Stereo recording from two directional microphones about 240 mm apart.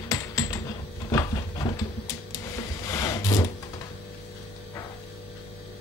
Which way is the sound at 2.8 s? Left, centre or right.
Centre.